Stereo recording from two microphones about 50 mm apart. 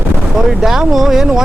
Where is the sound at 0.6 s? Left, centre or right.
Centre.